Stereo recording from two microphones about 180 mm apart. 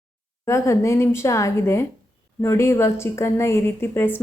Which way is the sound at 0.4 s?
15° left (ahead or behind).